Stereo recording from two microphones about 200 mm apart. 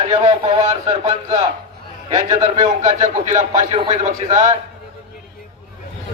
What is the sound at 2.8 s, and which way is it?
A man's voice, 35° right (ahead or behind).